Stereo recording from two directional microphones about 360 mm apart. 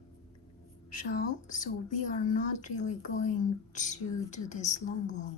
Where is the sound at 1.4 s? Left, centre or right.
Left.